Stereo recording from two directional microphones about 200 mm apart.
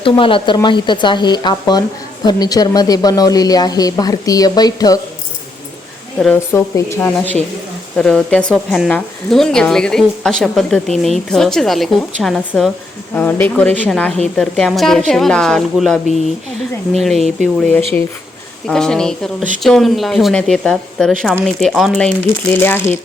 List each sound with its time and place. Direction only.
0.0 s speech: 25° left (ahead or behind)
6.1 s a woman's voice: 5° left (ahead or behind)
17.0 s speech: centre (ahead or behind)